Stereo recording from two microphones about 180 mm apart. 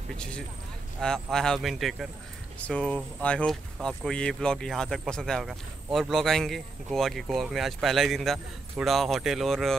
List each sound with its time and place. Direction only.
1.0 s speech: 5° left (ahead or behind)